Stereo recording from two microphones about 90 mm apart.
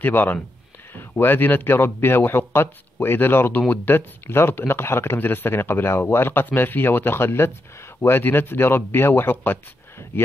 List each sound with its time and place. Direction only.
0.0 s speech: 20° left (ahead or behind)